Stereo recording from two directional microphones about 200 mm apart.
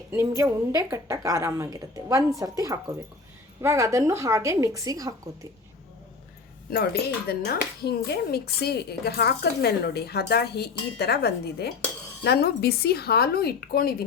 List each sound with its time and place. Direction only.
0.1 s a woman's voice: 15° right (ahead or behind)
7.3 s speech: 55° left (ahead or behind)